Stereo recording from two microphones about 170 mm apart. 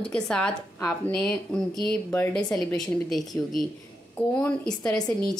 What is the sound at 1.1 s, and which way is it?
A woman's voice, 5° left (ahead or behind).